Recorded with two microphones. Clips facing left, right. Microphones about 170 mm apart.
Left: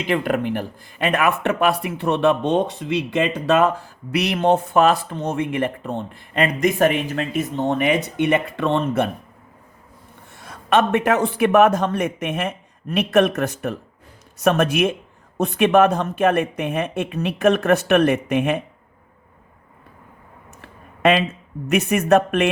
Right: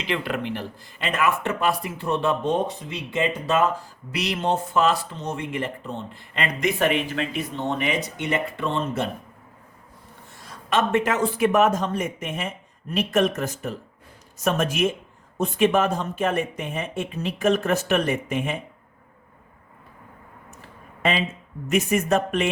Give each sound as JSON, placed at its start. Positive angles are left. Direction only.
{"t": 0.0, "sound": "speech", "side_deg": 50}
{"t": 10.4, "sound": "speech", "side_deg": 60}
{"t": 20.6, "sound": "a sound", "side_deg": 65}
{"t": 21.7, "sound": "speech", "side_deg": 65}